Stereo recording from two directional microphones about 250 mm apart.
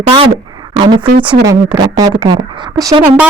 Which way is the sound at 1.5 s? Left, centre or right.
Centre.